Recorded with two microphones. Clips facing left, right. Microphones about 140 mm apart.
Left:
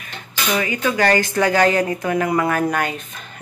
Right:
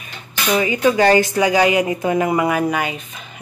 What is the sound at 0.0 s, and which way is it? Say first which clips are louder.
Speech: right 2 dB; 20° right (ahead or behind).